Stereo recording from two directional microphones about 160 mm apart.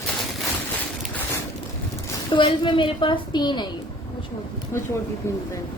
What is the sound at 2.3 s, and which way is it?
A woman's voice, 30° left (ahead or behind).